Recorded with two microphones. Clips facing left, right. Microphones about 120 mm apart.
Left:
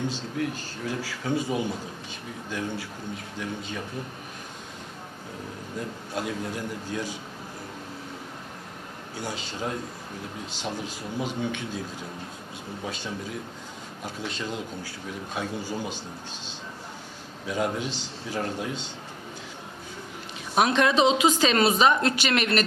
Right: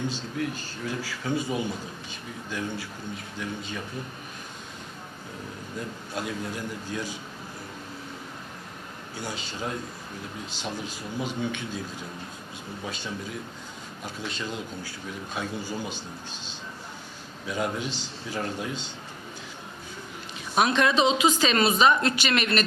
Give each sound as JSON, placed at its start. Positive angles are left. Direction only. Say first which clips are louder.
{"t": 0.0, "sound": "a man's voice", "louder": "left 1 dB", "side_deg": 40}
{"t": 5.8, "sound": "a man's voice", "louder": "left 2 dB", "side_deg": 45}
{"t": 9.1, "sound": "a man's voice", "louder": "left 1 dB", "side_deg": 50}
{"t": 11.3, "sound": "a man's voice", "louder": "left 1 dB", "side_deg": 45}
{"t": 17.4, "sound": "a man's voice", "louder": "left 2 dB", "side_deg": 50}
{"t": 17.7, "sound": "a man's voice", "louder": "left 1 dB", "side_deg": 65}
{"t": 18.3, "sound": "a man's voice", "louder": "left 1 dB", "side_deg": 40}
{"t": 20.6, "sound": "a man's voice", "louder": "left 1 dB", "side_deg": 50}